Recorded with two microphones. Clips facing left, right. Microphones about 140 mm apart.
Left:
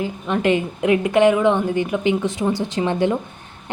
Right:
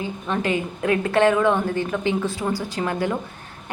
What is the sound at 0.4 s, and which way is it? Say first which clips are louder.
A woman's voice: left 6 dB; 20° left (ahead or behind).